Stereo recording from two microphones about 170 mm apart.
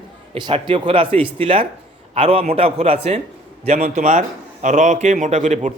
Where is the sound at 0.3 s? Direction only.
30° right (ahead or behind).